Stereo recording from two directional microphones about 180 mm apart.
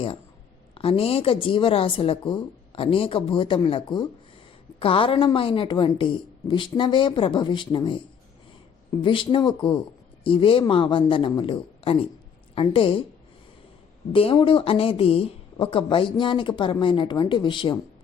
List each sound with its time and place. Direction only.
0.7 s speech: 30° left (ahead or behind)
9.0 s speech: 30° left (ahead or behind)
14.1 s speech: 30° left (ahead or behind)